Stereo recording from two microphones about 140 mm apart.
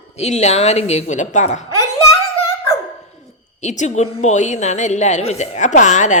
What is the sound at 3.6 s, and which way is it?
A woman's voice, 55° left (ahead or behind).